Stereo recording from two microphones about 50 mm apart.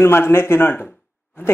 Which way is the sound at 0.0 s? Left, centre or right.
Left.